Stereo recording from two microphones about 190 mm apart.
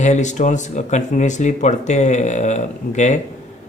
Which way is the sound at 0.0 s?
40° left (ahead or behind).